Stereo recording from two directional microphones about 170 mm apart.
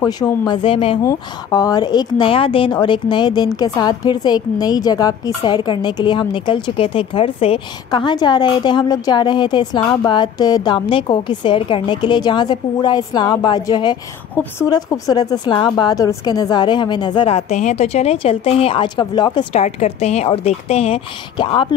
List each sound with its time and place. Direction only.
0.0 s a woman's voice: 20° left (ahead or behind)
1.0 s a woman's voice: 20° left (ahead or behind)
14.4 s a woman's voice: 10° left (ahead or behind)
14.7 s a woman's voice: 20° left (ahead or behind)
19.6 s speech: 40° left (ahead or behind)